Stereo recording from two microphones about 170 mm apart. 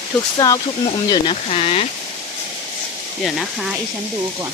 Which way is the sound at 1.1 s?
30° left (ahead or behind).